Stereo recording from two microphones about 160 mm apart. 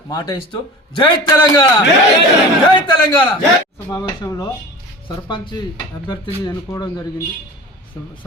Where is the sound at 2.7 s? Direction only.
30° left (ahead or behind).